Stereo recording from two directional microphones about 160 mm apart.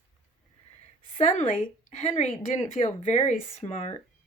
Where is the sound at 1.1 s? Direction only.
45° left (ahead or behind).